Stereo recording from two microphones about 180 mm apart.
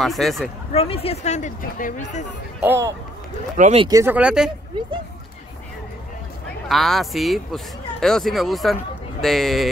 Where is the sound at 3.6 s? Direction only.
40° right (ahead or behind).